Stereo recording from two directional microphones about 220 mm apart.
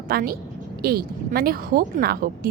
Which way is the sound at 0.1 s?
40° right (ahead or behind).